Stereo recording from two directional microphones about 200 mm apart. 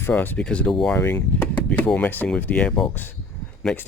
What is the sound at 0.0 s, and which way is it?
Speech, 10° left (ahead or behind).